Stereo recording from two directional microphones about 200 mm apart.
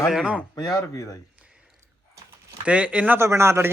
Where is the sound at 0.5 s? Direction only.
20° left (ahead or behind).